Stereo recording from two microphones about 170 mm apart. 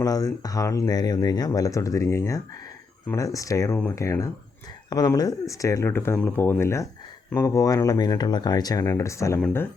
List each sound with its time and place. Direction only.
0.0 s speech: 20° left (ahead or behind)